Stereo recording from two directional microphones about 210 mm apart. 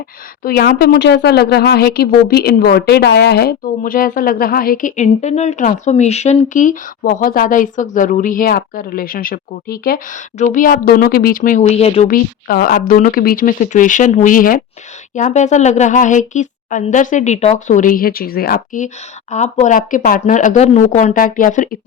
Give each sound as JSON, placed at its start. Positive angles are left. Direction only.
{"t": 0.4, "sound": "speech", "side_deg": 45}
{"t": 12.1, "sound": "a woman's voice", "side_deg": 45}